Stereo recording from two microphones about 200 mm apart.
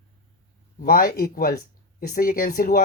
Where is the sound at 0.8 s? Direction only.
45° left (ahead or behind).